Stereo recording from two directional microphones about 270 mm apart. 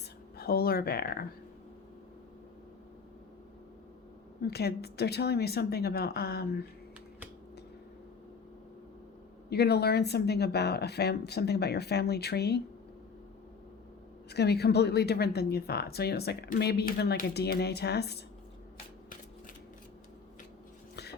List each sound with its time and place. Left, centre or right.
0.3 s a woman's voice: left
4.4 s a woman's voice: left
9.5 s a woman's voice: left
14.3 s a woman's voice: left
20.9 s dog: left